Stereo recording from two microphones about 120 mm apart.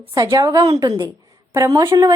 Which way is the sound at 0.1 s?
35° right (ahead or behind).